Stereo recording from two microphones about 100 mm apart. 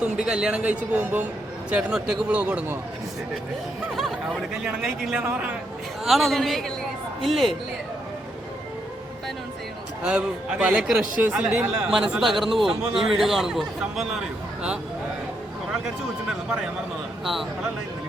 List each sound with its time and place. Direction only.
0.0 s speech: 10° right (ahead or behind)
1.7 s speech: 5° right (ahead or behind)
4.6 s a man's voice: 5° right (ahead or behind)
5.2 s speech: 15° right (ahead or behind)
6.1 s a man's voice: centre (ahead or behind)
10.0 s a man's voice: 10° right (ahead or behind)